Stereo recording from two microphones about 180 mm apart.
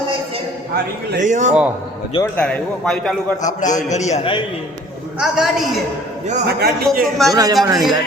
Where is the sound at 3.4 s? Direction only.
45° left (ahead or behind).